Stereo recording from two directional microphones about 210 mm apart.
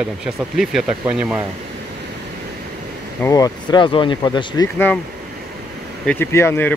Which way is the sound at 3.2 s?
15° left (ahead or behind).